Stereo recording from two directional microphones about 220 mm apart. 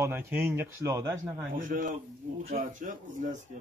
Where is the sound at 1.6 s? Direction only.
40° right (ahead or behind).